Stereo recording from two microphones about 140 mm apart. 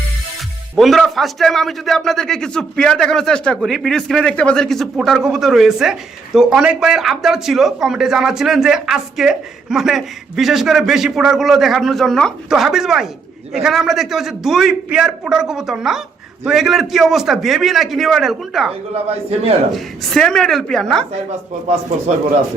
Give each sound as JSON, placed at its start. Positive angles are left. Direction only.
{"t": 0.8, "sound": "a man's voice", "side_deg": 0}
{"t": 18.9, "sound": "a man's voice", "side_deg": -45}
{"t": 19.7, "sound": "a man's voice", "side_deg": 5}